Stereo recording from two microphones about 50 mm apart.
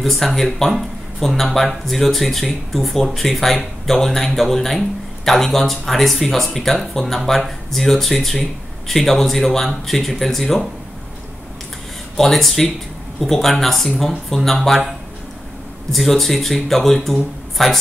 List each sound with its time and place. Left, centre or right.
0.0 s speech: centre
12.2 s speech: centre
15.9 s speech: centre